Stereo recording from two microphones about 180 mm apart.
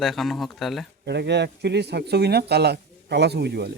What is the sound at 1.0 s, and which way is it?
Speech, 70° right (ahead or behind).